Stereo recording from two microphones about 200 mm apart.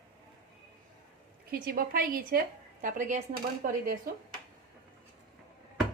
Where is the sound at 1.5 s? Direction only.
45° right (ahead or behind).